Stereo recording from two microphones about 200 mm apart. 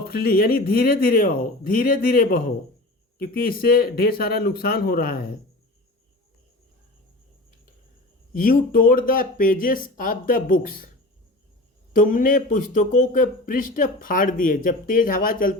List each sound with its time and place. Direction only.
0.0 s a man's voice: 50° left (ahead or behind)
8.3 s a man's voice: 45° left (ahead or behind)
11.9 s a man's voice: 45° left (ahead or behind)